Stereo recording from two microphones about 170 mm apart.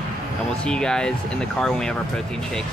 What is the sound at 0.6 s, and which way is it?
Speech, 5° left (ahead or behind).